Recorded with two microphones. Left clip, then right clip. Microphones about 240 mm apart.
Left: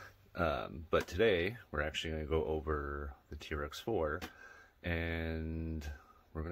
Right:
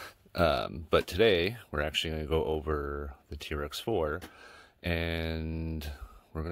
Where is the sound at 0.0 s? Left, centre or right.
Right.